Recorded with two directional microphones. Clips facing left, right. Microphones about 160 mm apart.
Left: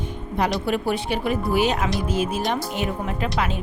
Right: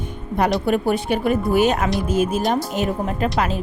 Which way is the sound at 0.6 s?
50° right (ahead or behind).